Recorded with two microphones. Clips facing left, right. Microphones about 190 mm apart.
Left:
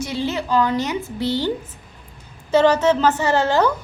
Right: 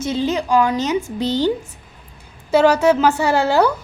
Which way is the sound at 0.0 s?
20° right (ahead or behind).